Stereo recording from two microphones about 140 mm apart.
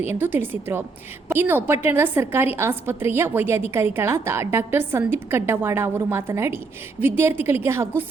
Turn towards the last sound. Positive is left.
turn(degrees=-15)  # may be behind; listen again after turning